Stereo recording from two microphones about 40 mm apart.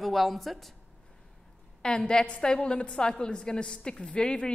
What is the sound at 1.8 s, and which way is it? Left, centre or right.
A woman's voice, left.